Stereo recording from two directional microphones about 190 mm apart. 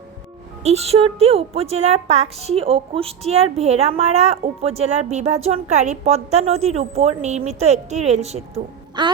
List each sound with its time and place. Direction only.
0.6 s a woman's voice: 35° right (ahead or behind)